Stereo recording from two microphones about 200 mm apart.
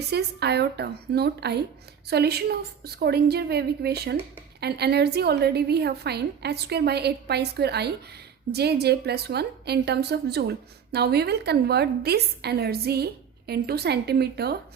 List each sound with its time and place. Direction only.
0.1 s a woman's voice: 55° right (ahead or behind)